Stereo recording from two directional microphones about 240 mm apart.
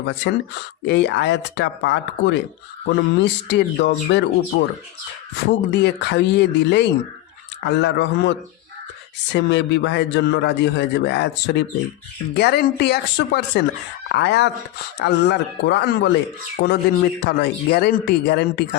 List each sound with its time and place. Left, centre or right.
0.0 s a man's voice: left
5.5 s a man's voice: left